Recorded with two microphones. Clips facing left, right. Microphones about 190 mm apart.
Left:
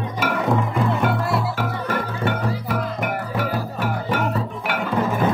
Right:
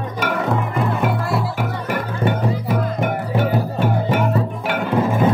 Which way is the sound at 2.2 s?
15° right (ahead or behind).